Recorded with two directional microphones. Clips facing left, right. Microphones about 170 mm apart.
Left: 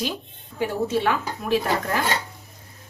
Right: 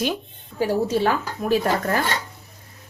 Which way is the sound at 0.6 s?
35° right (ahead or behind).